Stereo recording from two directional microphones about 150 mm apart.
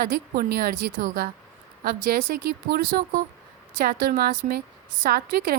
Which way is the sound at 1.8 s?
75° right (ahead or behind).